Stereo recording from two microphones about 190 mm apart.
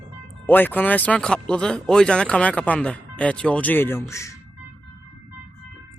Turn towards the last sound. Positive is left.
turn(degrees=15)  # may be behind; listen again after turning